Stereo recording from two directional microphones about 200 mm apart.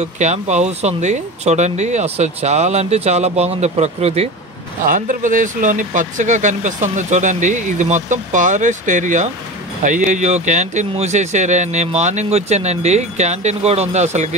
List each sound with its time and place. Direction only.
0.0 s speech: 35° right (ahead or behind)
4.8 s speech: 40° right (ahead or behind)